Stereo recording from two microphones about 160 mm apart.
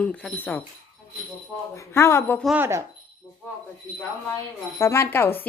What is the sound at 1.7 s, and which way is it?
Speech, 20° left (ahead or behind).